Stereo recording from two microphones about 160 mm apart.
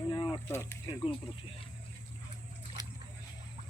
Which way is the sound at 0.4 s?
15° left (ahead or behind).